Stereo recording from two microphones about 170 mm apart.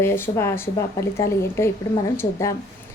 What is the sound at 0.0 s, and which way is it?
A woman's voice, 15° left (ahead or behind).